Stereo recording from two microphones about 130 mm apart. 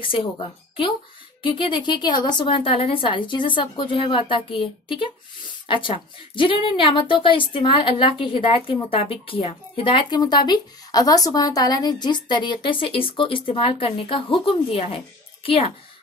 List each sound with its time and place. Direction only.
0.0 s speech: 40° left (ahead or behind)